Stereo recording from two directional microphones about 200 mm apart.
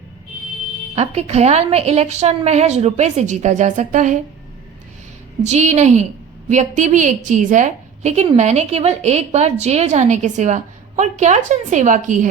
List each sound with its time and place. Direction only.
0.9 s a woman's voice: 35° right (ahead or behind)
5.4 s a woman's voice: 35° right (ahead or behind)